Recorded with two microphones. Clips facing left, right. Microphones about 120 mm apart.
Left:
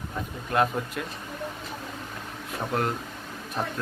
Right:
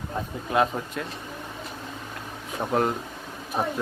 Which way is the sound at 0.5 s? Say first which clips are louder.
Right 1 dB; centre (ahead or behind).